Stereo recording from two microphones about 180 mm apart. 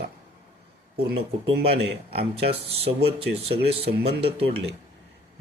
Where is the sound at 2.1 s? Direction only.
35° right (ahead or behind).